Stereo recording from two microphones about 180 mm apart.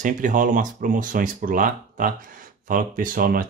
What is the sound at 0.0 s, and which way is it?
Speech, 45° right (ahead or behind).